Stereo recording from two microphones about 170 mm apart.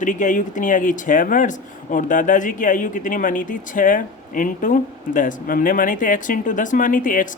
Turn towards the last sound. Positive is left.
turn(degrees=50)  # may be behind; listen again after turning